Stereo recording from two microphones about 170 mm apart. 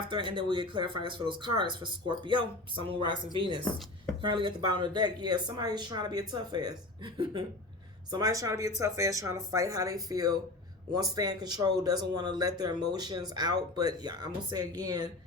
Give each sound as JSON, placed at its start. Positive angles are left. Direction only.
{"t": 0.1, "sound": "speech", "side_deg": -30}